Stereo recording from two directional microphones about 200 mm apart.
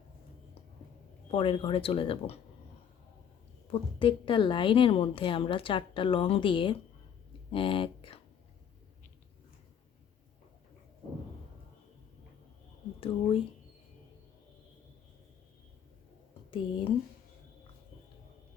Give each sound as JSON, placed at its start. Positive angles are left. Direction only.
{"t": 1.3, "sound": "a woman's voice", "side_deg": 25}
{"t": 3.7, "sound": "a woman's voice", "side_deg": 25}
{"t": 13.0, "sound": "a woman's voice", "side_deg": 25}
{"t": 16.5, "sound": "speech", "side_deg": 25}